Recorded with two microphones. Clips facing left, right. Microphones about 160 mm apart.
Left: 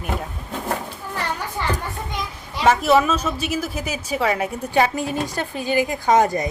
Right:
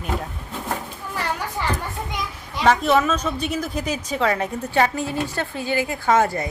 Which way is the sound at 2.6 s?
5° left (ahead or behind).